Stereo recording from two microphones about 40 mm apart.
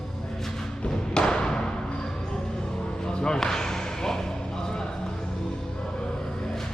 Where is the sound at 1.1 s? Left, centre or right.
Left.